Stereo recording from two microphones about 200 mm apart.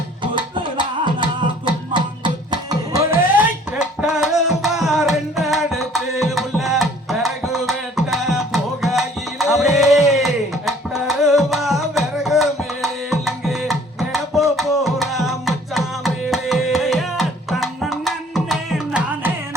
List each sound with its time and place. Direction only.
0.2 s music: 25° right (ahead or behind); by 19.3 s 5° right (ahead or behind)